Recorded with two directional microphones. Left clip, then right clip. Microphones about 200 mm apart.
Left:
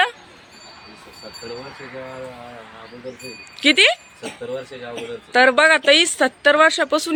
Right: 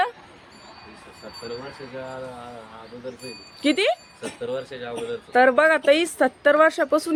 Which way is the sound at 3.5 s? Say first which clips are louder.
Left 7 dB; centre (ahead or behind).